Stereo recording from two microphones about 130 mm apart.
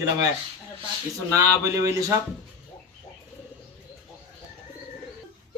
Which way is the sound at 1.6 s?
25° right (ahead or behind).